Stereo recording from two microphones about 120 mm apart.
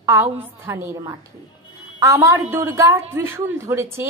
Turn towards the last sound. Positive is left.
turn(degrees=-25)  # may be behind; listen again after turning